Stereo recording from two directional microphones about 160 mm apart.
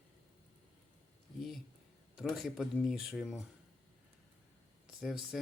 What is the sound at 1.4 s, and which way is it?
Speech, centre (ahead or behind).